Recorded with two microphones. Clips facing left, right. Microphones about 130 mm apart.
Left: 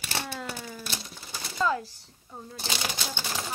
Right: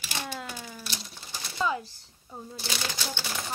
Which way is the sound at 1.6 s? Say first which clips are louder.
Left 2 dB; 10° right (ahead or behind).